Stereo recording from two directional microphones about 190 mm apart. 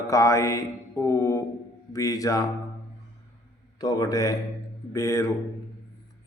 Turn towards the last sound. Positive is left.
turn(degrees=15)  # may be behind; listen again after turning